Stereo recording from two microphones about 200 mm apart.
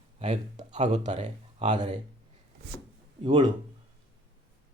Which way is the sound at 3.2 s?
25° right (ahead or behind).